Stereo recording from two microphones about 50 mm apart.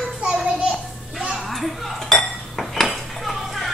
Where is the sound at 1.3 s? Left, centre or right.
Centre.